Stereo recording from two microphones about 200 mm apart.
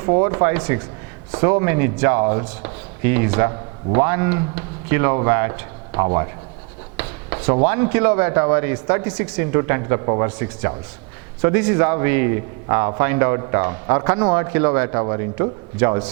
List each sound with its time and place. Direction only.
0.0 s a man's voice: 25° right (ahead or behind)
6.9 s writing: 15° right (ahead or behind)
7.3 s speech: 30° right (ahead or behind)
7.7 s a man's voice: 15° right (ahead or behind)